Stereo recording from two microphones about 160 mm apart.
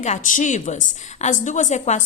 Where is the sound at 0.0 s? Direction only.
50° left (ahead or behind).